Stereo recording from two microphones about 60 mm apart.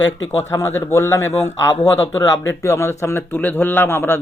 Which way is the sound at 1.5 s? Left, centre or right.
Left.